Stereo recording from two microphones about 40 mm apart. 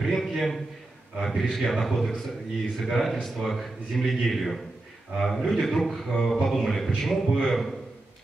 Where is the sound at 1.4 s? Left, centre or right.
Centre.